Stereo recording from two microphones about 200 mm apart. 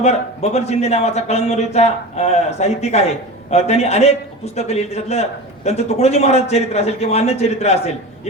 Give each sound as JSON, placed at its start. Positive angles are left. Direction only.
{"t": 0.0, "sound": "speech", "side_deg": 35}